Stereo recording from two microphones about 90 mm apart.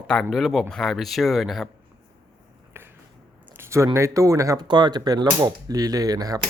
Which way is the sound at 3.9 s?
35° right (ahead or behind).